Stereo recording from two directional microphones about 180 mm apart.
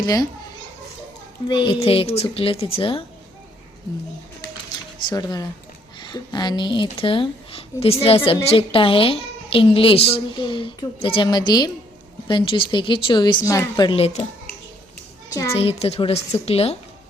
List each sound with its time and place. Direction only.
0.0 s a woman's voice: 20° left (ahead or behind)
1.5 s speech: 25° left (ahead or behind)
5.0 s a woman's voice: 20° left (ahead or behind)
15.3 s a child's voice: 15° left (ahead or behind)
15.5 s speech: 35° left (ahead or behind)